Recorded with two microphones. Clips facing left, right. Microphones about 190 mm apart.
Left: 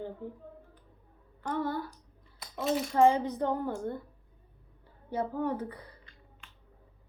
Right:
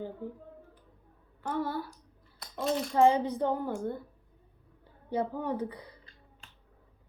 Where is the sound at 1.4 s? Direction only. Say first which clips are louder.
Even; 5° right (ahead or behind).